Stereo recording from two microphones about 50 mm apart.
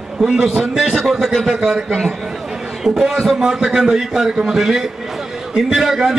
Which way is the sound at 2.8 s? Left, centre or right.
Centre.